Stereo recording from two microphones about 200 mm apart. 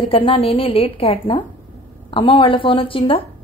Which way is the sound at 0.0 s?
25° left (ahead or behind).